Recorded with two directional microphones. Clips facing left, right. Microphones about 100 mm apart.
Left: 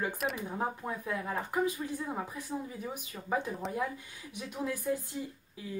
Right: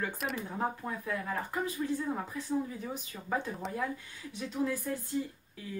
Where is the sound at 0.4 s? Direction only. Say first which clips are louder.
Even; 15° left (ahead or behind).